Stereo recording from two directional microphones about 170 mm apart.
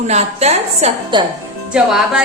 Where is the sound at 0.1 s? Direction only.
40° right (ahead or behind).